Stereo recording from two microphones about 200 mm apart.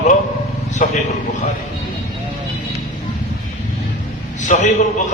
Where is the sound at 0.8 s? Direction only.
40° left (ahead or behind).